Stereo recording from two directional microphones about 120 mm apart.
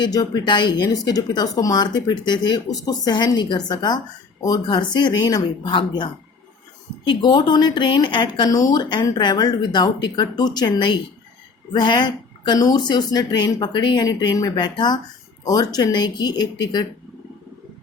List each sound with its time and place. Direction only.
0.0 s a woman's voice: 35° left (ahead or behind)